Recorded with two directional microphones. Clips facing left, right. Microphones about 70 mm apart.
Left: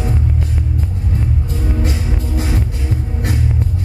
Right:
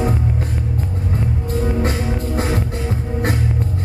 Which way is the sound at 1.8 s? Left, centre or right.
Right.